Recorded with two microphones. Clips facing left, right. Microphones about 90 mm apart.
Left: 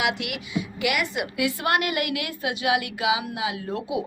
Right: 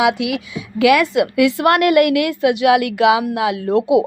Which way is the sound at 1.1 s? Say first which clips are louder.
Right 12 dB; 90° right.